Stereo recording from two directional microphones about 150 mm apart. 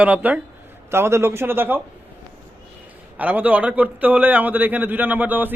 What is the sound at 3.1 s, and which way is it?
A man's voice, 10° right (ahead or behind).